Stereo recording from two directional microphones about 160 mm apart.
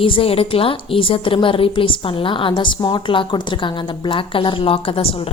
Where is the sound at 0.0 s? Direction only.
35° left (ahead or behind).